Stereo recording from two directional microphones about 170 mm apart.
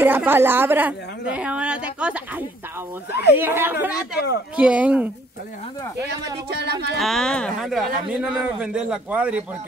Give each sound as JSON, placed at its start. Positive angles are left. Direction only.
{"t": 0.0, "sound": "a woman's voice", "side_deg": -10}
{"t": 5.9, "sound": "speech", "side_deg": -20}
{"t": 6.5, "sound": "speech", "side_deg": -75}
{"t": 7.0, "sound": "a man's voice", "side_deg": 0}